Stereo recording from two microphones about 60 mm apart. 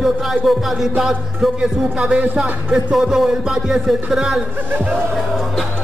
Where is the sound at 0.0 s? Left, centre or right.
Centre.